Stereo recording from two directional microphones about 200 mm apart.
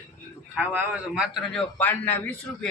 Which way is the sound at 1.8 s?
10° left (ahead or behind).